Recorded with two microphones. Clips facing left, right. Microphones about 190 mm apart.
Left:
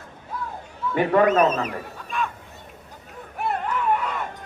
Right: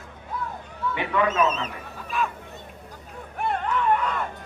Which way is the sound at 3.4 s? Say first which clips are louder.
Even; 5° left (ahead or behind).